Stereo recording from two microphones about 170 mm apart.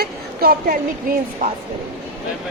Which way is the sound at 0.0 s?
65° right (ahead or behind).